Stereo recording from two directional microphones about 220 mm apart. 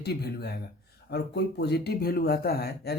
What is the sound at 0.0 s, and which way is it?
Speech, 45° left (ahead or behind).